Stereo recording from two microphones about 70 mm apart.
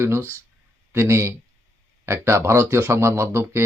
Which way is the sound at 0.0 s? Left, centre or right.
Right.